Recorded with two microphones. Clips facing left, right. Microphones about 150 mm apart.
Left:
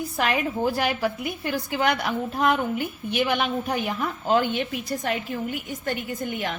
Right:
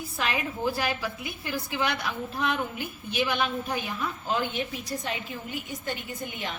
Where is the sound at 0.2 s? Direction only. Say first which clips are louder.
Left 5 dB; 55° left (ahead or behind).